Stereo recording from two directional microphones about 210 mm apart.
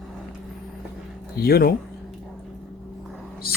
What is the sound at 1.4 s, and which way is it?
Speech, 45° left (ahead or behind).